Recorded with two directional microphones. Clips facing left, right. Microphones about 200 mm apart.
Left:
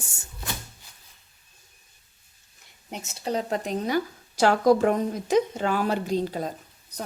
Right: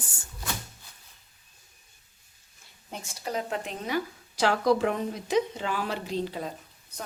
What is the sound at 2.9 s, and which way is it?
Speech, 25° left (ahead or behind).